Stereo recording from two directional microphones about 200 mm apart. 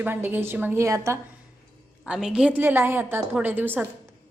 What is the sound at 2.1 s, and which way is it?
A woman's voice, 5° right (ahead or behind).